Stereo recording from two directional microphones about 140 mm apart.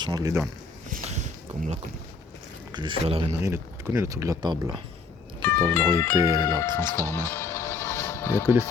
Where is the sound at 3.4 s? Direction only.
20° right (ahead or behind).